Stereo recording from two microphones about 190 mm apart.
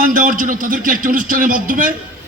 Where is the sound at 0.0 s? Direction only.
45° right (ahead or behind).